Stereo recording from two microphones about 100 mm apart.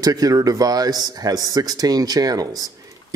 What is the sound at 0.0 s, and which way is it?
A man's voice, 40° right (ahead or behind).